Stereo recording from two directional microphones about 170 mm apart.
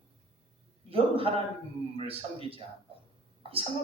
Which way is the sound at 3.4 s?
35° right (ahead or behind).